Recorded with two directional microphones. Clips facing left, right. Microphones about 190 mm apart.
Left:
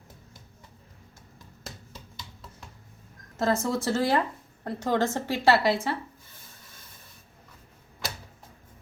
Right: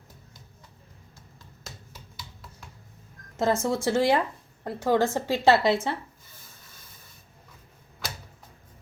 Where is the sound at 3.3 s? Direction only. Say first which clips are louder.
Right 1 dB; 20° right (ahead or behind).